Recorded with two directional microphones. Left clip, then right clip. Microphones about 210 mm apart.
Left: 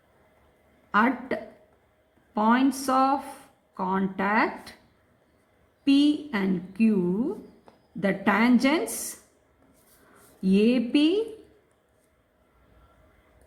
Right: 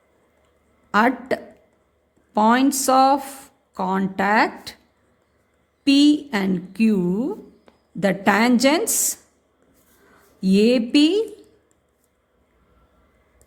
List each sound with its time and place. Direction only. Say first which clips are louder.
0.9 s a woman's voice: right 5 dB; 45° right (ahead or behind)
5.8 s a woman's voice: right 6 dB; 45° right (ahead or behind)
10.4 s a woman's voice: right 6 dB; 40° right (ahead or behind)